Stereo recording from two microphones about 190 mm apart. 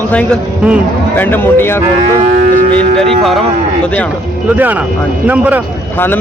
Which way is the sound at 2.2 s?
35° right (ahead or behind).